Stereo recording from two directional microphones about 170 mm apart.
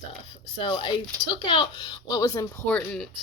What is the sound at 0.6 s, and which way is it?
Speech, 30° left (ahead or behind).